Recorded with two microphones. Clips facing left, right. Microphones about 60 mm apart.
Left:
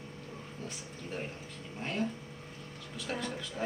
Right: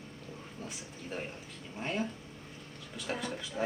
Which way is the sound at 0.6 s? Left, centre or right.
Centre.